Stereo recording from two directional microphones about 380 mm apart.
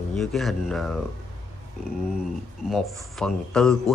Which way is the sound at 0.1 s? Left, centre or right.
Centre.